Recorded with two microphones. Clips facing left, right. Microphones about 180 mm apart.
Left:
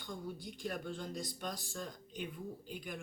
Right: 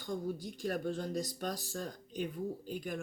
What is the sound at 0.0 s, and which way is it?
Speech, 45° right (ahead or behind).